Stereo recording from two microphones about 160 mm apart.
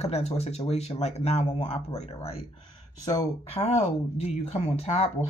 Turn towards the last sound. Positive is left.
turn(degrees=40)  # may be behind; listen again after turning